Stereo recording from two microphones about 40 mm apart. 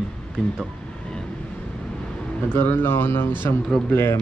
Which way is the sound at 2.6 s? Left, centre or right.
Left.